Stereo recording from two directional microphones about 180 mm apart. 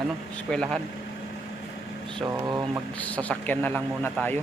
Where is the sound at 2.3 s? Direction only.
20° right (ahead or behind).